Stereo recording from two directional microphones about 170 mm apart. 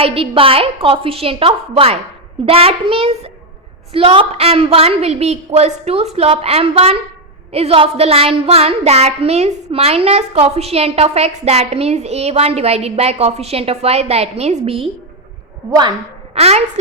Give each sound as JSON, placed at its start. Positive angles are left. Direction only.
{"t": 0.0, "sound": "child singing", "side_deg": -35}
{"t": 16.3, "sound": "a woman's voice", "side_deg": -40}